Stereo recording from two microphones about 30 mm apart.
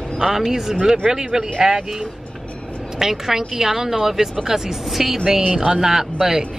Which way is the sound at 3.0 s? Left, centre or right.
Centre.